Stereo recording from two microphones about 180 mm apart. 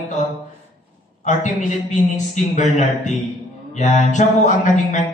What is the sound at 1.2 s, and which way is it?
A man's voice, 45° left (ahead or behind).